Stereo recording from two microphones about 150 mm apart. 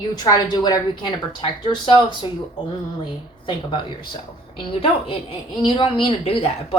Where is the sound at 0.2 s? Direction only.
25° left (ahead or behind).